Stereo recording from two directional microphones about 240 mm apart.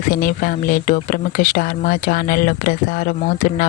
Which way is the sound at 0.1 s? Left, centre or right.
Left.